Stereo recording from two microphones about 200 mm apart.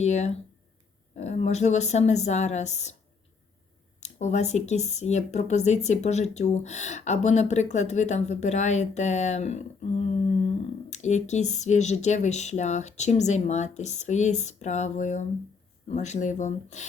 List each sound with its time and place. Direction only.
0.0 s speech: 35° left (ahead or behind)
4.0 s speech: 35° left (ahead or behind)